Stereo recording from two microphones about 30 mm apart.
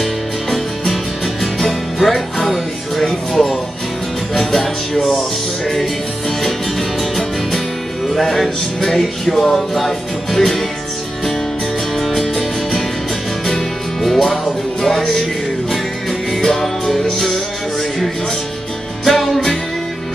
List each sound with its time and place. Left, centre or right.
0.0 s music: centre
6.4 s music: centre
12.0 s music: centre
13.5 s music: centre